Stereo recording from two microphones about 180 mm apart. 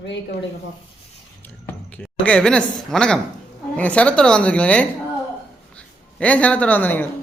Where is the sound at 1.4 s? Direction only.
10° left (ahead or behind).